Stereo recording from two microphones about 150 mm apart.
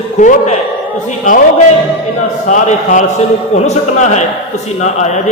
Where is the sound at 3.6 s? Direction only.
50° left (ahead or behind).